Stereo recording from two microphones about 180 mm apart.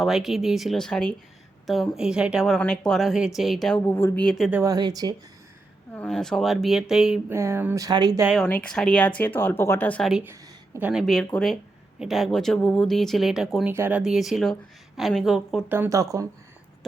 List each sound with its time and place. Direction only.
0.0 s a woman's voice: centre (ahead or behind)
3.8 s a woman's voice: 15° left (ahead or behind); by 4.6 s centre (ahead or behind)
4.6 s speech: 20° right (ahead or behind)
6.0 s a woman's voice: 5° left (ahead or behind)
7.3 s speech: 15° right (ahead or behind)
8.4 s speech: 5° left (ahead or behind)
10.8 s a woman's voice: 5° right (ahead or behind)